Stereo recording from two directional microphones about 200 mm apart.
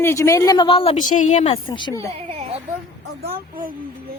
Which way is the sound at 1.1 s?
40° left (ahead or behind).